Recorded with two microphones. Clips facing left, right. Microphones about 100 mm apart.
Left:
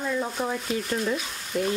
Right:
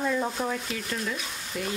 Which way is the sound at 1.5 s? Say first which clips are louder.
Left 7 dB; 40° left (ahead or behind).